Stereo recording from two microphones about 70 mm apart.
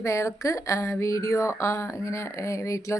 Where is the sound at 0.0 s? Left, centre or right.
Left.